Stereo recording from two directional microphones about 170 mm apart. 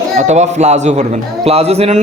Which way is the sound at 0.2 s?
40° right (ahead or behind).